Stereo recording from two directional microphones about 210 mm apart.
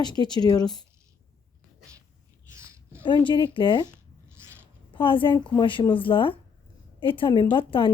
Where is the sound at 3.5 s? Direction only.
20° left (ahead or behind).